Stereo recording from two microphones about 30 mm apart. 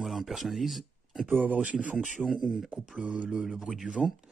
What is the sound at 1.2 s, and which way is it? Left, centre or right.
Speech, right.